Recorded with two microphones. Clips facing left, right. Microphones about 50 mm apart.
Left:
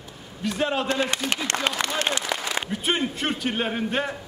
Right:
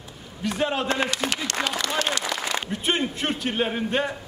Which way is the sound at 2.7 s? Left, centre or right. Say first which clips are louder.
Even; centre.